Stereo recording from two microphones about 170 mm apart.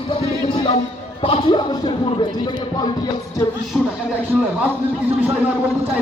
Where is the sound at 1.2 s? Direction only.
30° left (ahead or behind).